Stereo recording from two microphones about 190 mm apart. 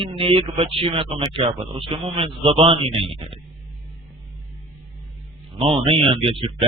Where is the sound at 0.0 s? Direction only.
30° right (ahead or behind).